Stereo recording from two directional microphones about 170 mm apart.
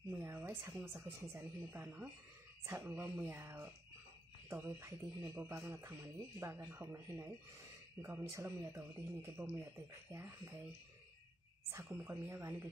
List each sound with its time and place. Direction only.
0.1 s a sound: 10° right (ahead or behind)
1.0 s speech: 15° right (ahead or behind)
11.7 s speech: 15° right (ahead or behind)